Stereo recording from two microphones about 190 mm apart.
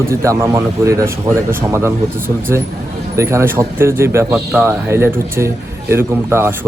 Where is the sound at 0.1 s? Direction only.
15° right (ahead or behind).